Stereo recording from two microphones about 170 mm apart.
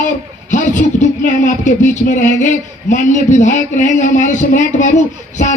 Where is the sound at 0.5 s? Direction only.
45° left (ahead or behind).